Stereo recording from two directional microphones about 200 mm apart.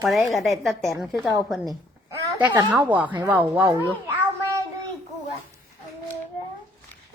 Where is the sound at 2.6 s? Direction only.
15° right (ahead or behind).